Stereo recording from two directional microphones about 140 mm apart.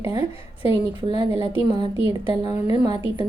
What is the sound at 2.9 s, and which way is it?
Speech, 40° left (ahead or behind).